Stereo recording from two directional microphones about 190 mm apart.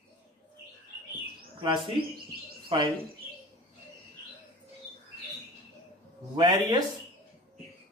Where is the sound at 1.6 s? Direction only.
25° right (ahead or behind).